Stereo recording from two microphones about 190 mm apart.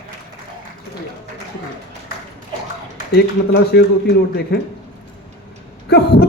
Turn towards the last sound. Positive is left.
turn(degrees=60)  # may be behind; listen again after turning